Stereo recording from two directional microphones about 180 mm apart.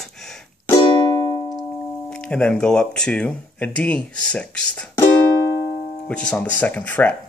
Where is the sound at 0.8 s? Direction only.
25° left (ahead or behind).